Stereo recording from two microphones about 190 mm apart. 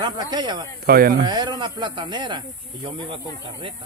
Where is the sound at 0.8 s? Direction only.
50° right (ahead or behind).